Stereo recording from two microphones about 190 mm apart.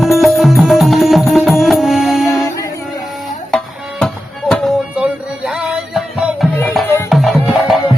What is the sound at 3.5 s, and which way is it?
Music, 5° left (ahead or behind).